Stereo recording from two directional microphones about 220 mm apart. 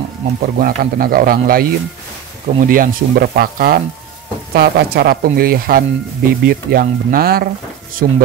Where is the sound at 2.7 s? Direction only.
40° right (ahead or behind).